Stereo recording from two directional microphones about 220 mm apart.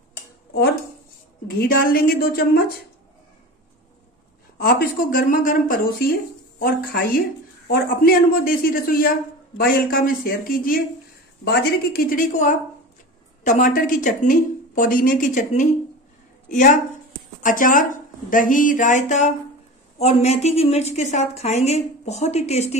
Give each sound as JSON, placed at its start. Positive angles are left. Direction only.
{"t": 0.5, "sound": "dishes", "side_deg": 45}
{"t": 1.6, "sound": "a woman's voice", "side_deg": 40}
{"t": 4.6, "sound": "a woman's voice", "side_deg": 40}
{"t": 17.4, "sound": "a woman's voice", "side_deg": 40}